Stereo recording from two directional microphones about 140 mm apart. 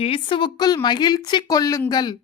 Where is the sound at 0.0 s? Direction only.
40° left (ahead or behind).